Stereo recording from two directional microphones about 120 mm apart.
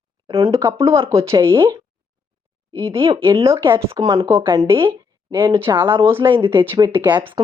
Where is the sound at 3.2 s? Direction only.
25° right (ahead or behind).